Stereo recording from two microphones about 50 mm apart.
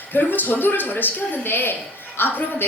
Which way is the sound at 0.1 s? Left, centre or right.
Left.